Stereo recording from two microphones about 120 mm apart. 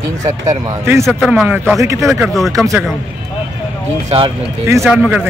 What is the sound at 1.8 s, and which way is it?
Speech, 25° right (ahead or behind).